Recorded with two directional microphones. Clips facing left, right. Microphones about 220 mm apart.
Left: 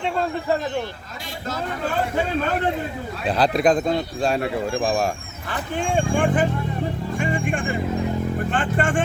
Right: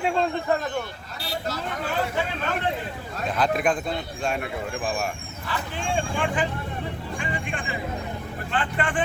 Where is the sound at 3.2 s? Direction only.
35° left (ahead or behind).